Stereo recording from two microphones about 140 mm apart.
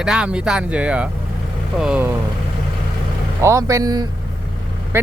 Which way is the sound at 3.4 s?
20° right (ahead or behind).